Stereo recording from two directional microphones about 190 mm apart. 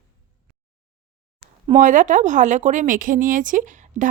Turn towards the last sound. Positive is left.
turn(degrees=-40)  # may be behind; listen again after turning